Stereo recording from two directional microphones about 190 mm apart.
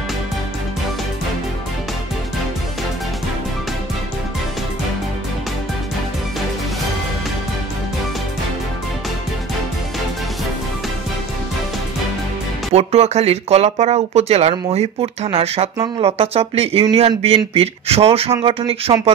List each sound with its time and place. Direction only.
12.7 s speech: 35° right (ahead or behind)